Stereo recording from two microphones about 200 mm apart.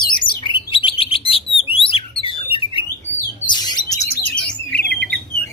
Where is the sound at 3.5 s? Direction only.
20° left (ahead or behind).